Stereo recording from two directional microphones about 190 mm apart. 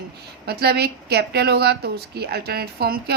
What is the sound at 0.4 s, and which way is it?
A woman's voice, 55° right (ahead or behind).